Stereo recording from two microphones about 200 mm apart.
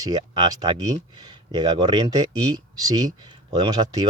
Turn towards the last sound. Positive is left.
turn(degrees=-20)  # may be behind; listen again after turning